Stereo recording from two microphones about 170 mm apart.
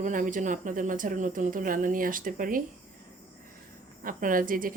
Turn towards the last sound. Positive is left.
turn(degrees=-55)  # may be behind; listen again after turning